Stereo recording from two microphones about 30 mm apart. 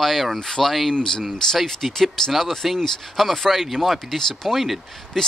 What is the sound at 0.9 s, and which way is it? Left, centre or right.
Speech, left.